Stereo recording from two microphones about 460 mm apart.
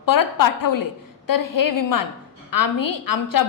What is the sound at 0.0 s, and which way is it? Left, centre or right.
A woman's voice, left.